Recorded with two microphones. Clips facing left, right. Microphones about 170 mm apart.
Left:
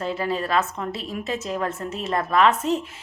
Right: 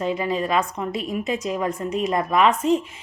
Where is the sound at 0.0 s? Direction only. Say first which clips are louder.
Right 2 dB; 10° right (ahead or behind).